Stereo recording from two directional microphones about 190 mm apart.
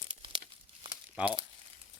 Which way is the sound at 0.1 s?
25° right (ahead or behind).